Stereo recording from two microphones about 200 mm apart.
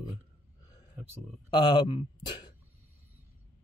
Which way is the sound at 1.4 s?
20° left (ahead or behind).